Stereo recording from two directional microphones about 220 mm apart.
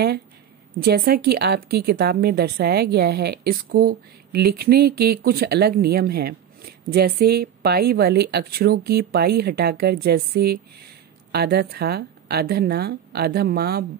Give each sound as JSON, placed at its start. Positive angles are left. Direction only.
{"t": 0.7, "sound": "a woman's voice", "side_deg": -45}